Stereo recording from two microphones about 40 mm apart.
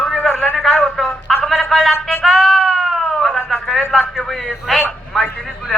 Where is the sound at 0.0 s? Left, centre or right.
Centre.